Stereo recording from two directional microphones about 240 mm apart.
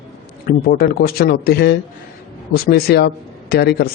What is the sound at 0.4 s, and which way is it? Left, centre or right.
Speech, left.